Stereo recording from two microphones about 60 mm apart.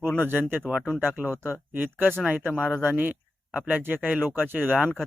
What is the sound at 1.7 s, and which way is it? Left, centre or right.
Speech, right.